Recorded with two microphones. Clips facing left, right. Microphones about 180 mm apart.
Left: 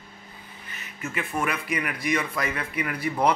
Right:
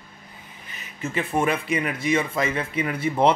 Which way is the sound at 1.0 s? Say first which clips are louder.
Right 5 dB; 30° right (ahead or behind).